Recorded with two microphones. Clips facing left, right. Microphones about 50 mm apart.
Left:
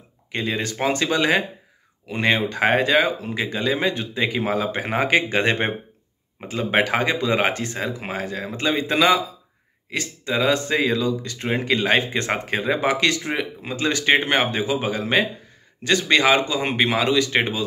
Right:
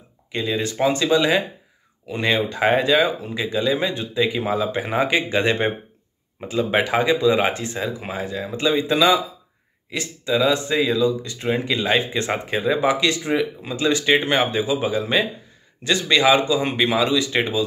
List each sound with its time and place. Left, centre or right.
0.3 s speech: left